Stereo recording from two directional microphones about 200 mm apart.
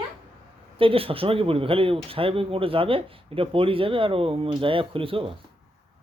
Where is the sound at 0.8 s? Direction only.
25° right (ahead or behind).